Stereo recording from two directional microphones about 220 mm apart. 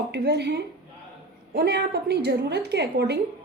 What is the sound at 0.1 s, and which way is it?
A woman's voice, 50° right (ahead or behind).